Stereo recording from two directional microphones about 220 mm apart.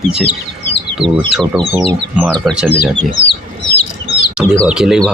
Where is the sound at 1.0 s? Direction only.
25° right (ahead or behind).